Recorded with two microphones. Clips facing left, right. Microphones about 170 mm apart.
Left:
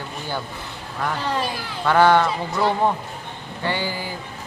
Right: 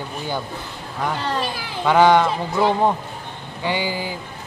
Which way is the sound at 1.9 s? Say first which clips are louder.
Right 2 dB; 15° right (ahead or behind).